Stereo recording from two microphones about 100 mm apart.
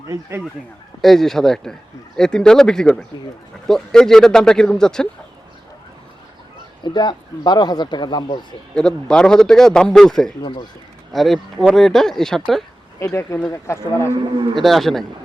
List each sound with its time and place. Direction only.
0.1 s speech: 25° right (ahead or behind)
1.0 s a man's voice: 5° left (ahead or behind)
6.8 s speech: 50° left (ahead or behind)
8.7 s a man's voice: 5° left (ahead or behind)
10.4 s speech: 50° left (ahead or behind)
11.1 s a man's voice: centre (ahead or behind)
13.0 s speech: 30° left (ahead or behind)
14.5 s a man's voice: centre (ahead or behind)